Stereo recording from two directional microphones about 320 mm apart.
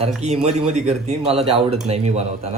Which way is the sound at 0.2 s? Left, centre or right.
Right.